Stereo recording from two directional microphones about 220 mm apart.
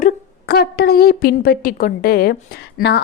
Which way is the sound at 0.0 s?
45° left (ahead or behind).